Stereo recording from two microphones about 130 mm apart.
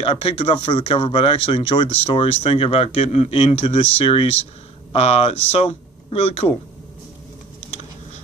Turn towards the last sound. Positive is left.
turn(degrees=50)  # may be behind; listen again after turning